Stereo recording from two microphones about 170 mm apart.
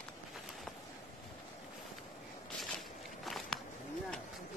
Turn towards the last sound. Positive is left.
turn(degrees=0)  # may be behind; listen again after turning